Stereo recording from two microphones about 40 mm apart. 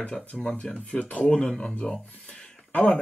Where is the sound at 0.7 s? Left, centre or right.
Left.